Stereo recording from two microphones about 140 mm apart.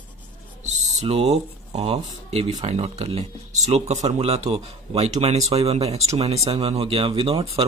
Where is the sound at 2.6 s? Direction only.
50° right (ahead or behind).